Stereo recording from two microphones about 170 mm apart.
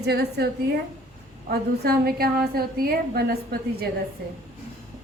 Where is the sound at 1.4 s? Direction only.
65° right (ahead or behind).